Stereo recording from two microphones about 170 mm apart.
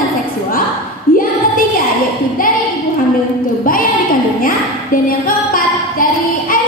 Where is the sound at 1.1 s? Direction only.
55° left (ahead or behind).